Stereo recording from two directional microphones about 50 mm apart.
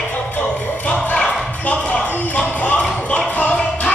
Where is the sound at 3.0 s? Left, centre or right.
Left.